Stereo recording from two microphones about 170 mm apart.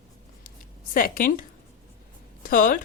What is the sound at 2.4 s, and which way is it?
Speech, 55° left (ahead or behind).